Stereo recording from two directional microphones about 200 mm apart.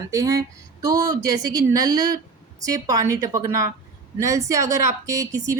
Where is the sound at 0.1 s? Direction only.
15° right (ahead or behind).